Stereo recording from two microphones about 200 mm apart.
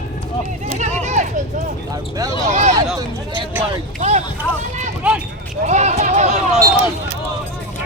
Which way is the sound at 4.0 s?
35° right (ahead or behind).